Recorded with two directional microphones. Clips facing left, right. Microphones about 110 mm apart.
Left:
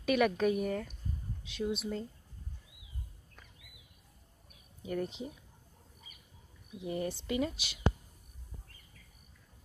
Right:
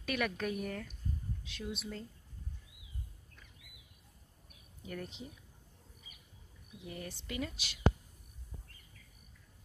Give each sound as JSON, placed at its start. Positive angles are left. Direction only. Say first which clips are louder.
{"t": 0.0, "sound": "speech", "louder": "left 8 dB", "side_deg": 15}
{"t": 4.8, "sound": "speech", "louder": "left 8 dB", "side_deg": 20}
{"t": 6.8, "sound": "speech", "louder": "left 10 dB", "side_deg": 25}